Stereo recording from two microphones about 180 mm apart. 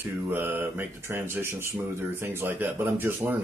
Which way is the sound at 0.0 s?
10° right (ahead or behind).